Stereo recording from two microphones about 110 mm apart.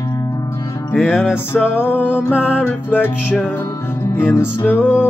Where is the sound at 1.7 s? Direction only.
15° left (ahead or behind).